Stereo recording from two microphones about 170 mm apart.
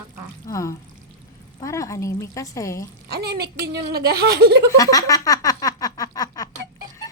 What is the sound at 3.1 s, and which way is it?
Speech, 70° right (ahead or behind).